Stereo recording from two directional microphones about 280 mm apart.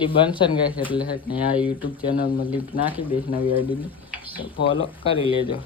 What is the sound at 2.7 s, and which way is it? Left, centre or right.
Speech, left.